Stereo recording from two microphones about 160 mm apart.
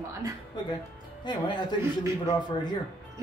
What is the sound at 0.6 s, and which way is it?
A man's voice, 25° left (ahead or behind).